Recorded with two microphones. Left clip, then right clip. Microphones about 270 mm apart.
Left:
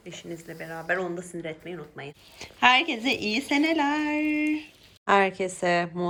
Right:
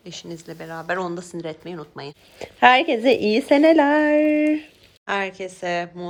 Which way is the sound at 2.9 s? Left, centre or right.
Left.